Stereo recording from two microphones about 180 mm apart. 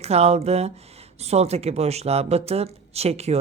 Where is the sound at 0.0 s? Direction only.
35° right (ahead or behind).